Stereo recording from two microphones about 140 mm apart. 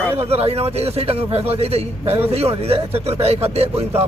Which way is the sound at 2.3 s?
45° right (ahead or behind).